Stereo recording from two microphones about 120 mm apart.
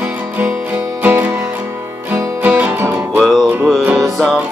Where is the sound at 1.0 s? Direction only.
15° right (ahead or behind).